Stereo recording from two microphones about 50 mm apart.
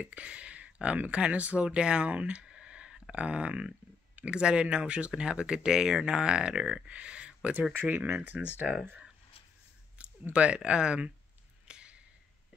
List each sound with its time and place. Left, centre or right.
0.0 s speech: right
8.1 s speech: right
8.6 s speech: centre
10.3 s speech: right
11.6 s a sound: right